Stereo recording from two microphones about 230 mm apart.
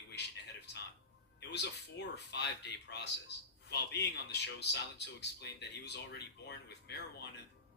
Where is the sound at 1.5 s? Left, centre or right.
Left.